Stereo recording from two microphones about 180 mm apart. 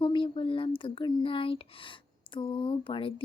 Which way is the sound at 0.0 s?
30° left (ahead or behind).